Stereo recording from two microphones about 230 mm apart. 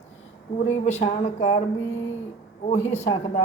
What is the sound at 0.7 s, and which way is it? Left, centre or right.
Speech, left.